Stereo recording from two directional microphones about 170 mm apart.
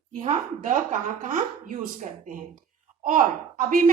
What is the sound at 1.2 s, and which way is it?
Speech, 50° right (ahead or behind).